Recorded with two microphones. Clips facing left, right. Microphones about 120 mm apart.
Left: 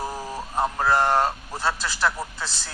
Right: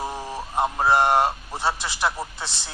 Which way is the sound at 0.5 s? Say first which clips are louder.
Right 2 dB; 20° right (ahead or behind).